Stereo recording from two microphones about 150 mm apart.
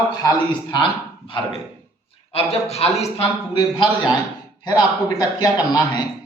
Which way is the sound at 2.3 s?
45° left (ahead or behind).